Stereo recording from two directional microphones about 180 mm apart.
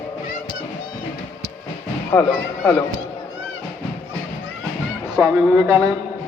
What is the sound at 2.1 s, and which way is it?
Speech, 15° left (ahead or behind).